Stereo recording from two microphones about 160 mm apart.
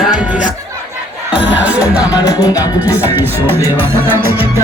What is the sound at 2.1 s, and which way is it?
Music, 20° left (ahead or behind).